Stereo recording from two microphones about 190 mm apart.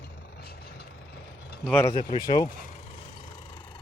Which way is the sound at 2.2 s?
20° left (ahead or behind).